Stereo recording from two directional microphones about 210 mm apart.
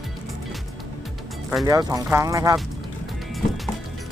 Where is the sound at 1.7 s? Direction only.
15° right (ahead or behind).